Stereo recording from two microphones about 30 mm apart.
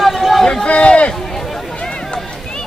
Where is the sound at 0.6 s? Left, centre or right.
Left.